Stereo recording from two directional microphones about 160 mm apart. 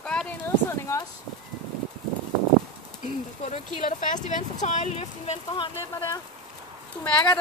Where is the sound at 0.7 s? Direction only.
20° left (ahead or behind).